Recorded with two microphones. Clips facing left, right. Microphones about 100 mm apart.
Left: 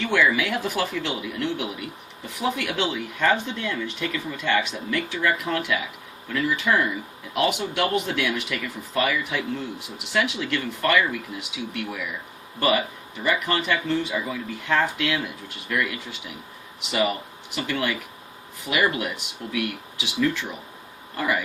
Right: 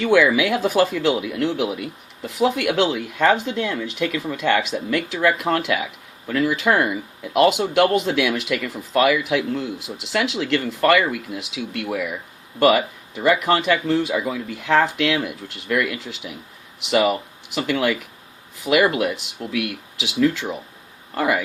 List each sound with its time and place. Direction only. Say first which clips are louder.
0.1 s speech: right 6 dB; 90° right
21.2 s speech: right 5 dB; 80° right